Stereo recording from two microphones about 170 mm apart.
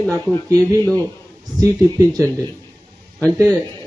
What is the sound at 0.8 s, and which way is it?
Speech, 10° left (ahead or behind).